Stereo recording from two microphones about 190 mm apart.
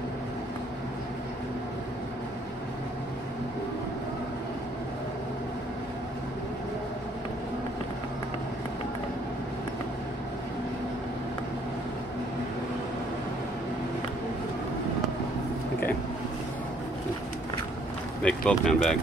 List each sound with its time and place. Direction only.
18.2 s speech: 5° left (ahead or behind)